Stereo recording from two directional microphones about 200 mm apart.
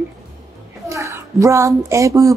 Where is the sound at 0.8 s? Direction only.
15° right (ahead or behind).